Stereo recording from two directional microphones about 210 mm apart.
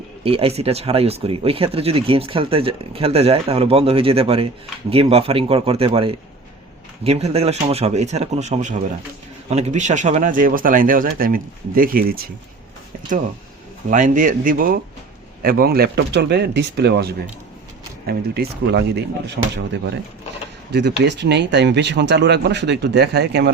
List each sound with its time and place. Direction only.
0.3 s speech: 25° right (ahead or behind); by 12.3 s 45° right (ahead or behind)
13.9 s speech: 40° right (ahead or behind)